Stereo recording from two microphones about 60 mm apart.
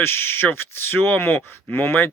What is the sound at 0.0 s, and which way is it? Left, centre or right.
Speech, left.